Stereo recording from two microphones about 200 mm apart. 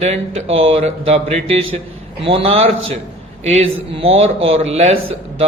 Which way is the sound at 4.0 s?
30° right (ahead or behind).